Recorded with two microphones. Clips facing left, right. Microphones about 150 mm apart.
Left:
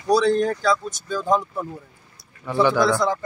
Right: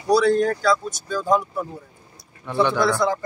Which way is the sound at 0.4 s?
20° left (ahead or behind).